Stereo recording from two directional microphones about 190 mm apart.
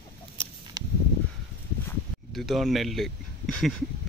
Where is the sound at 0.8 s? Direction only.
20° right (ahead or behind).